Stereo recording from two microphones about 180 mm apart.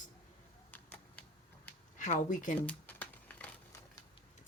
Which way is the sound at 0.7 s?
10° left (ahead or behind).